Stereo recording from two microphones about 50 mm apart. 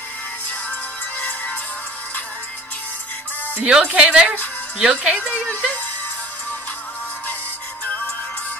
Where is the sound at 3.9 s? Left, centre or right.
Right.